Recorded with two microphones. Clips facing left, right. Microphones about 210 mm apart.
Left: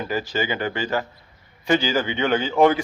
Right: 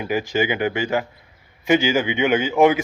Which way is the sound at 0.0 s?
10° right (ahead or behind).